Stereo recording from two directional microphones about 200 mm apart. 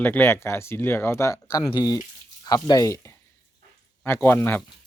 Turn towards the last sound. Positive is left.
turn(degrees=10)  # may be behind; listen again after turning